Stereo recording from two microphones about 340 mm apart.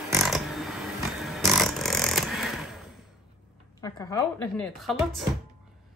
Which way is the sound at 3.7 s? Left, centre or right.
Centre.